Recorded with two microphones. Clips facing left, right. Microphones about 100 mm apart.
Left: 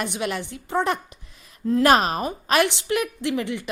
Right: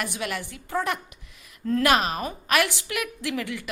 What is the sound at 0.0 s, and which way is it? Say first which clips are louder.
A woman's voice: left 4 dB; 25° left (ahead or behind).